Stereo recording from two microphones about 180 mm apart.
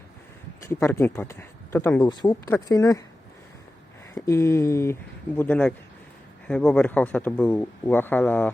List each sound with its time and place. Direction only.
0.7 s speech: 15° left (ahead or behind)
4.1 s speech: 15° left (ahead or behind)